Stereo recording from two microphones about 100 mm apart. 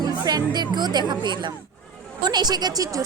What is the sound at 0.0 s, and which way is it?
A woman's voice, 45° right (ahead or behind).